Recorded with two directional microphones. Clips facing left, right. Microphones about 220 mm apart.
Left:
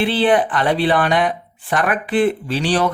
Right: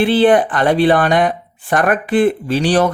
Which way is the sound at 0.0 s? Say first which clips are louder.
Right 4 dB; 45° right (ahead or behind).